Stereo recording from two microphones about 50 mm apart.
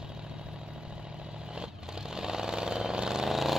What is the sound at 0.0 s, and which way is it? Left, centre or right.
Vehicle, centre.